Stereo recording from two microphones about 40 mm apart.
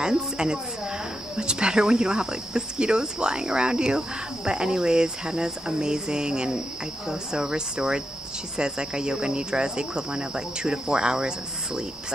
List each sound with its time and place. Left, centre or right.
0.0 s speech: centre